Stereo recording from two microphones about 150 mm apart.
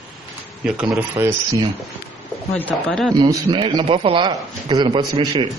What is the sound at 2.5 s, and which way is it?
Speech, 10° left (ahead or behind).